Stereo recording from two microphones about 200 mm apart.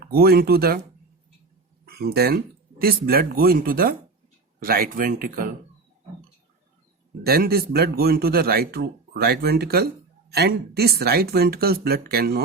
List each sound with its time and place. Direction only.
0.0 s a man's voice: 50° right (ahead or behind)
1.8 s a man's voice: 50° right (ahead or behind)
7.3 s a man's voice: 50° right (ahead or behind)